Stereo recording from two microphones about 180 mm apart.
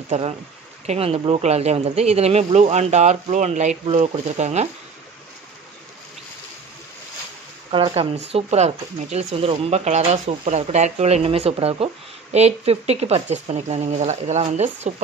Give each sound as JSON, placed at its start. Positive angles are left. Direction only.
{"t": 0.1, "sound": "speech", "side_deg": -40}
{"t": 7.7, "sound": "speech", "side_deg": -30}